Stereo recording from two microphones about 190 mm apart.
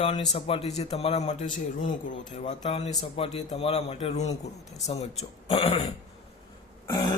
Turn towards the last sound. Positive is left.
turn(degrees=25)  # may be behind; listen again after turning